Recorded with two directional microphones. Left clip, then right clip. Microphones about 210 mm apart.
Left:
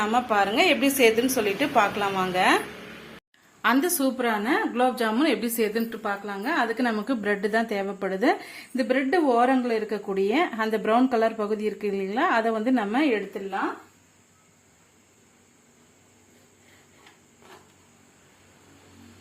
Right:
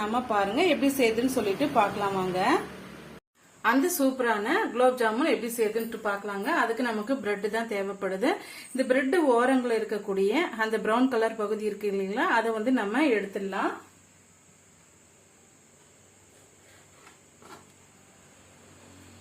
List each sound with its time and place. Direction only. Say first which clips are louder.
0.0 s a woman's voice: left 4 dB; centre (ahead or behind)
3.6 s a woman's voice: left 1 dB; 45° left (ahead or behind)